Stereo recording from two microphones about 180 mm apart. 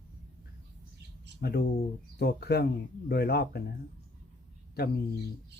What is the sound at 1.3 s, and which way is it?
Speech, 65° left (ahead or behind).